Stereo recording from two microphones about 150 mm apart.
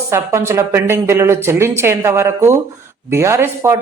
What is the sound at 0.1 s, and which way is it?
Speech, 20° right (ahead or behind).